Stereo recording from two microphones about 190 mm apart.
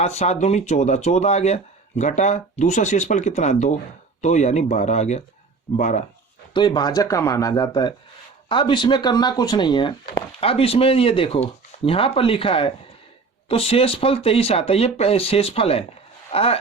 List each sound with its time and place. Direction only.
0.0 s speech: 35° left (ahead or behind)
6.5 s speech: 25° left (ahead or behind)